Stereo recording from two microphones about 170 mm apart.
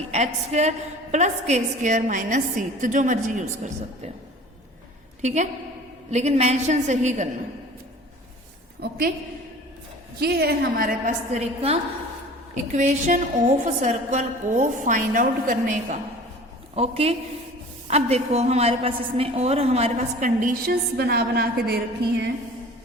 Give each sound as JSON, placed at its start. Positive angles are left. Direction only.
{"t": 0.1, "sound": "a woman's voice", "side_deg": -40}
{"t": 5.2, "sound": "a woman's voice", "side_deg": -45}
{"t": 8.8, "sound": "a woman's voice", "side_deg": -60}
{"t": 10.2, "sound": "a woman's voice", "side_deg": -70}
{"t": 16.7, "sound": "a woman's voice", "side_deg": -35}